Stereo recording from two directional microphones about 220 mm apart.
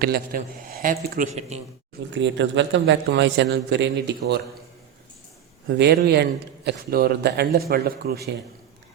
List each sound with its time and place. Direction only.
0.0 s a man's voice: 40° right (ahead or behind)
2.1 s a man's voice: 55° right (ahead or behind)
5.6 s a man's voice: 50° right (ahead or behind)